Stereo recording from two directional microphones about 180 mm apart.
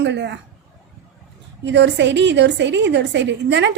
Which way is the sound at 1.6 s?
75° right (ahead or behind).